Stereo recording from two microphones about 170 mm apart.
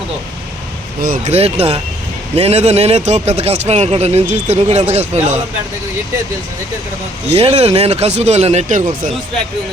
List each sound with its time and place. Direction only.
1.0 s speech: 55° right (ahead or behind)
1.3 s a man's voice: 35° right (ahead or behind)
7.3 s a man's voice: 35° right (ahead or behind)